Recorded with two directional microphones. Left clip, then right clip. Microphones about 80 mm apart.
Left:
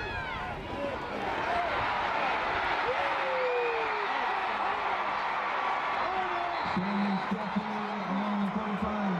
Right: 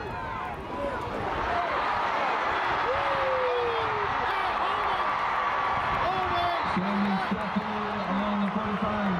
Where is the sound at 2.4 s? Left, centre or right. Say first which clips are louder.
Right 3 dB; centre.